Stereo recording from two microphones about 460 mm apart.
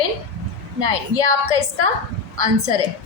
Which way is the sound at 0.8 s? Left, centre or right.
Right.